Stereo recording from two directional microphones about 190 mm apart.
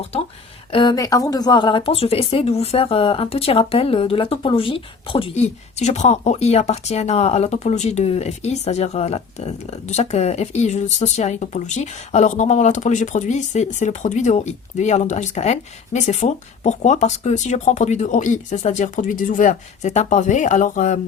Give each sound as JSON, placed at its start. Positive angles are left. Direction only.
{"t": 0.7, "sound": "speech", "side_deg": 25}